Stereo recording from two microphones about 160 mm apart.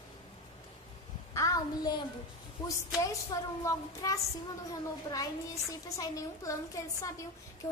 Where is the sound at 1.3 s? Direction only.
20° left (ahead or behind).